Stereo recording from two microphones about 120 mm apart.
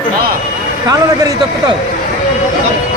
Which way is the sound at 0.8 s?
30° right (ahead or behind).